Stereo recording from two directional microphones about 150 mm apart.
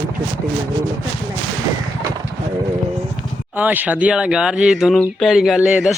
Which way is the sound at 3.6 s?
10° right (ahead or behind).